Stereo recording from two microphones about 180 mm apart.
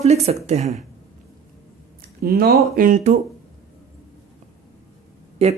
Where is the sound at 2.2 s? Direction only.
60° right (ahead or behind); by 3.2 s 45° right (ahead or behind).